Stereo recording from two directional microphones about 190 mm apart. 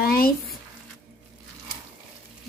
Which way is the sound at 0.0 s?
50° left (ahead or behind).